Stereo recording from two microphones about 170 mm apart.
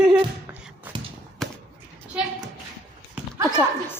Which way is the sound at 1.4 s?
Centre (ahead or behind).